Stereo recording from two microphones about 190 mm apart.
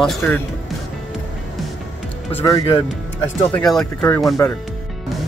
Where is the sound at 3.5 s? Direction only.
5° left (ahead or behind).